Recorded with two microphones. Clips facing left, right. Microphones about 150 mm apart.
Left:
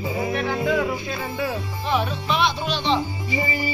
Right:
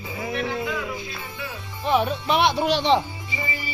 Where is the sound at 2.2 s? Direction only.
60° right (ahead or behind).